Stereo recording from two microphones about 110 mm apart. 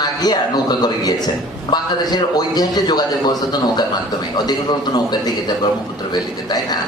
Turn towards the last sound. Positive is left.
turn(degrees=40)  # may be behind; listen again after turning